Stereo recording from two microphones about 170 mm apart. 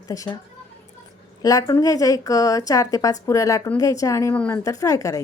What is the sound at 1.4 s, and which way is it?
A woman's voice, 20° left (ahead or behind).